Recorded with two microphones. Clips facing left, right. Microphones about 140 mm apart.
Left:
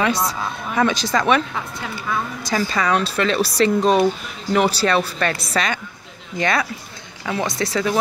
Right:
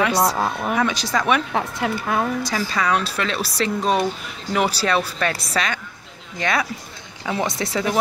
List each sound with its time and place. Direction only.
0.2 s speech: 70° right (ahead or behind)
0.7 s speech: 5° right (ahead or behind)
1.5 s speech: 75° right (ahead or behind)
2.5 s speech: centre (ahead or behind)
7.2 s speech: 15° right (ahead or behind)